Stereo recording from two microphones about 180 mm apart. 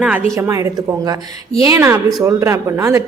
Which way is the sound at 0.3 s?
20° right (ahead or behind).